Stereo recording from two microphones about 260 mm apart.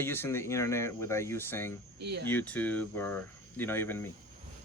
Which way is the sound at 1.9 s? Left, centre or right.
Right.